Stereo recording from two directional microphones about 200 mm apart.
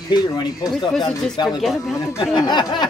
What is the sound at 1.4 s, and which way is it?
Speech, centre (ahead or behind).